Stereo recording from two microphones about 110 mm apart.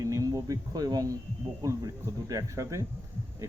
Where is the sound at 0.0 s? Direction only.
30° right (ahead or behind).